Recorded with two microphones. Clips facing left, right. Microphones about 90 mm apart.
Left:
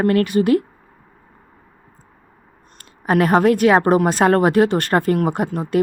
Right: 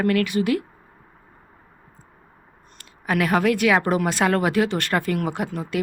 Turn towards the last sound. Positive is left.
turn(degrees=40)  # may be behind; listen again after turning